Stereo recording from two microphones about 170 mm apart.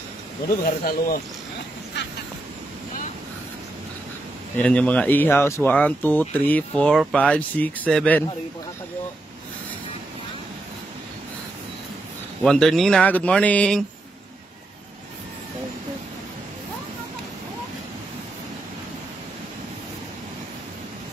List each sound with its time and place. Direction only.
0.7 s speech: 60° left (ahead or behind)
4.6 s speech: 5° left (ahead or behind)
12.4 s speech: 5° left (ahead or behind)